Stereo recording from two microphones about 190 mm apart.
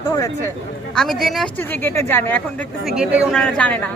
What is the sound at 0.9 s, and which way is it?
Speech, centre (ahead or behind).